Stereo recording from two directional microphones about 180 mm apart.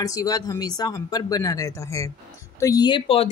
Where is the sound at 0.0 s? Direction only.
20° left (ahead or behind).